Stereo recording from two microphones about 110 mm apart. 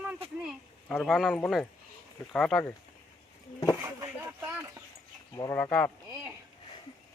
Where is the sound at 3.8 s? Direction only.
25° right (ahead or behind).